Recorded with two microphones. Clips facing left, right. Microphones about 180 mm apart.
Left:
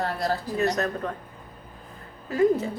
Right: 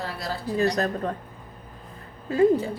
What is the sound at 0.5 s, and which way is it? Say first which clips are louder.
Speech: right 3 dB; 35° right (ahead or behind).